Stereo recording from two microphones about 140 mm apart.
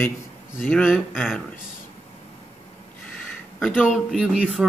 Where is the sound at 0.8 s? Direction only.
5° right (ahead or behind).